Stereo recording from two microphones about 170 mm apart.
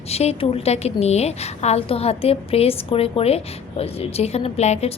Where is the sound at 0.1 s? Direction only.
35° left (ahead or behind).